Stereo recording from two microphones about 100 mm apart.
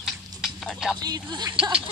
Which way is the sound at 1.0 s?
45° right (ahead or behind).